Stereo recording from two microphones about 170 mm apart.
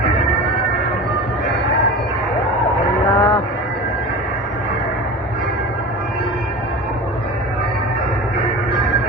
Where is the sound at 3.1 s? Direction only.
15° left (ahead or behind).